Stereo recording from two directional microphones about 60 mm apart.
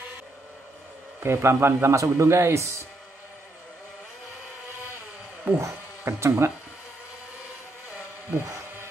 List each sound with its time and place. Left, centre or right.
1.2 s a man's voice: right
5.6 s speech: right
8.3 s a sound: right